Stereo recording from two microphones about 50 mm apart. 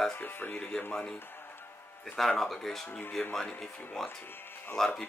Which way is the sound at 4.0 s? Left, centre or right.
Centre.